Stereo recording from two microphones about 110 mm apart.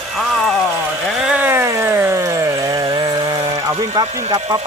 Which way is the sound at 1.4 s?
20° right (ahead or behind).